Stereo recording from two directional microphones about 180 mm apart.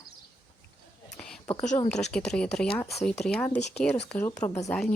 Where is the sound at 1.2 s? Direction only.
5° left (ahead or behind).